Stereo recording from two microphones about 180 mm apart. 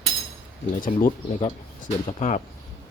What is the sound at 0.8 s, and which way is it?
Speech, 50° left (ahead or behind).